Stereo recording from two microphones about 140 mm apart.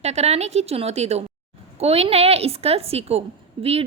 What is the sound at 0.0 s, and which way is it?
A woman's voice, 50° right (ahead or behind).